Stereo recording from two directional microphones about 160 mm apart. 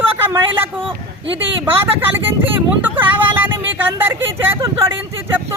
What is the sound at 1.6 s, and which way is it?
Speech, 15° right (ahead or behind).